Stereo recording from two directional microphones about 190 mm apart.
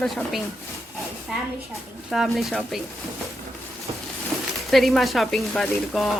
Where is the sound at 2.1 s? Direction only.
Centre (ahead or behind).